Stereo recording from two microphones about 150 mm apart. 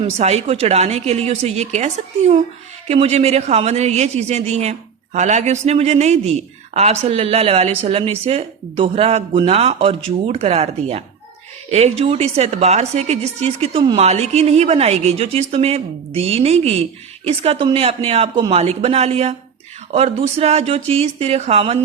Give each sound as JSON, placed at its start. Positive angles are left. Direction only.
{"t": 0.0, "sound": "a woman's voice", "side_deg": -45}